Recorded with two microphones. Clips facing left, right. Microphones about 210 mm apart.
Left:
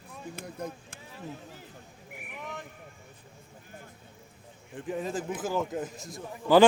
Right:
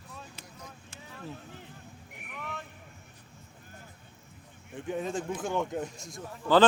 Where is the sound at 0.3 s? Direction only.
55° left (ahead or behind).